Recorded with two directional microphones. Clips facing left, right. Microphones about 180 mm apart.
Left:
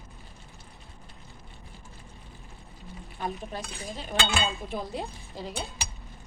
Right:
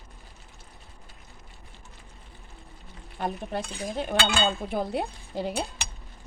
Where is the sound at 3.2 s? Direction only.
60° right (ahead or behind).